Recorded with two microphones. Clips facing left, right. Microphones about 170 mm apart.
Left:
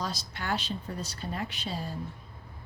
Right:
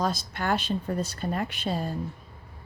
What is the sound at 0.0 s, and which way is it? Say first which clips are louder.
A woman's voice: right 7 dB; 50° right (ahead or behind).